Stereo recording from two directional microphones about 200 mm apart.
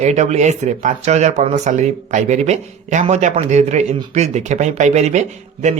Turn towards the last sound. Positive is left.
turn(degrees=-35)  # may be behind; listen again after turning